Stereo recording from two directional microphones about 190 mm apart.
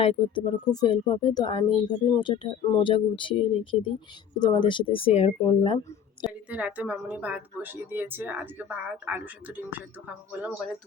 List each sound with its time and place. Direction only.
0.0 s speech: 30° left (ahead or behind)
6.2 s a woman's voice: 5° right (ahead or behind)